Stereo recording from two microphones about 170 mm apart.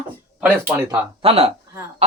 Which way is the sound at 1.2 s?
35° right (ahead or behind).